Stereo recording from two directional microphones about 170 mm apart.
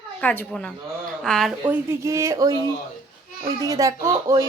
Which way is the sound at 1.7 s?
15° right (ahead or behind).